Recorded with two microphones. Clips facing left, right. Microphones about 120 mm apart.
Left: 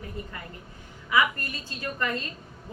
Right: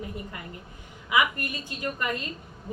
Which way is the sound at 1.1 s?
20° right (ahead or behind).